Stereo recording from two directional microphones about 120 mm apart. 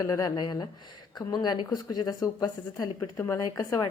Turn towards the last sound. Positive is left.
turn(degrees=30)  # may be behind; listen again after turning